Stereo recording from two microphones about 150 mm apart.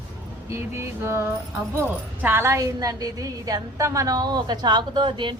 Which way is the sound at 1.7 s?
15° right (ahead or behind).